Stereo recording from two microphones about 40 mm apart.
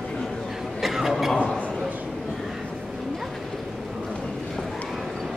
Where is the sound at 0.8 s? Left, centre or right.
Centre.